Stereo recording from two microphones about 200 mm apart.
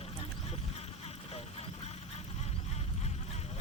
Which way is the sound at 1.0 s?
30° left (ahead or behind).